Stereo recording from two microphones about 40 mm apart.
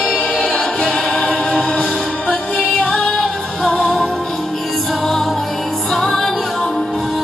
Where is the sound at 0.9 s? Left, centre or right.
Centre.